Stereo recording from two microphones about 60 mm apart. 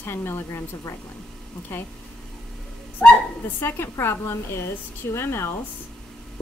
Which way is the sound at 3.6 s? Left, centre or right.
Left.